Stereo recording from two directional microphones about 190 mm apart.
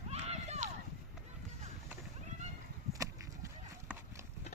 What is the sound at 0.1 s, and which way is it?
Run, 35° right (ahead or behind).